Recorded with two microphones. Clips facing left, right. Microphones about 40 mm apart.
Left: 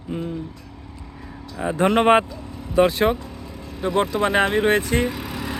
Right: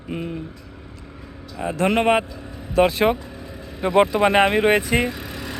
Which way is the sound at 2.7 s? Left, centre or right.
Centre.